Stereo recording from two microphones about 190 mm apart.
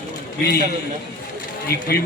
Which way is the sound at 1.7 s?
55° left (ahead or behind).